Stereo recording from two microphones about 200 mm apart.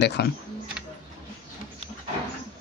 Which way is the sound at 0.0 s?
55° left (ahead or behind).